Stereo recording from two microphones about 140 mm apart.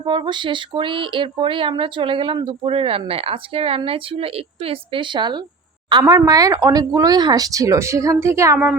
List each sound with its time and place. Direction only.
0.0 s speech: 35° right (ahead or behind)